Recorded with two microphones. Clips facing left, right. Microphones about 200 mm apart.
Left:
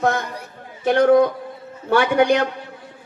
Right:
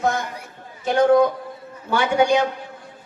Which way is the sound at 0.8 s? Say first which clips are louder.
Left 2 dB; 60° left (ahead or behind).